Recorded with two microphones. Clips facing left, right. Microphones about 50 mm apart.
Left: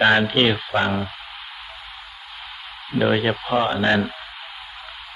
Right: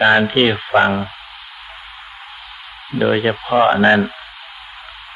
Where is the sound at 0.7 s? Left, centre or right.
Right.